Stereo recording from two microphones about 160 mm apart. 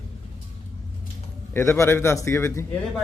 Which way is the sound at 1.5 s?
15° left (ahead or behind).